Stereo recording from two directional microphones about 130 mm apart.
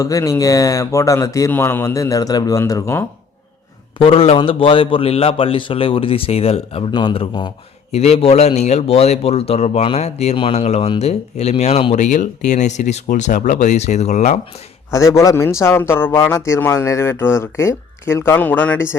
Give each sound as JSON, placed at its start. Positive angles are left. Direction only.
{"t": 0.0, "sound": "speech", "side_deg": 25}
{"t": 3.9, "sound": "a man's voice", "side_deg": 45}
{"t": 7.9, "sound": "speech", "side_deg": 55}
{"t": 14.9, "sound": "speech", "side_deg": 25}